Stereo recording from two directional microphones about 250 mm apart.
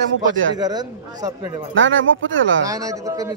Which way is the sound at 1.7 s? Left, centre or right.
Right.